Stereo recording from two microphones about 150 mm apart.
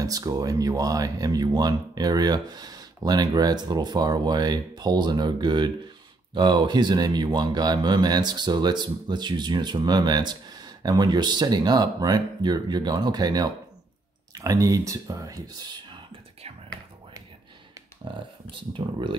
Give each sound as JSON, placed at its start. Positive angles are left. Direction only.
{"t": 0.0, "sound": "speech", "side_deg": -25}
{"t": 18.0, "sound": "speech", "side_deg": -35}